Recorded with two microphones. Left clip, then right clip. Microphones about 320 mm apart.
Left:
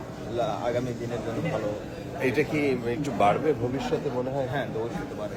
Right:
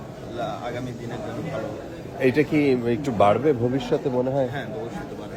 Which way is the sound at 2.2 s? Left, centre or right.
Right.